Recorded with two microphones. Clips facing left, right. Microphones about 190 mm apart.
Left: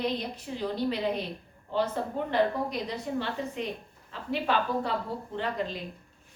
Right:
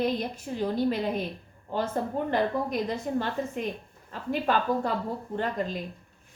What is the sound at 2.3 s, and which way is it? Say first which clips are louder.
A woman's voice: left 2 dB; 50° right (ahead or behind).